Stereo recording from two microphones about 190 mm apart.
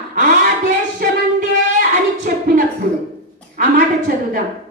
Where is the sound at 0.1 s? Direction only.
45° right (ahead or behind).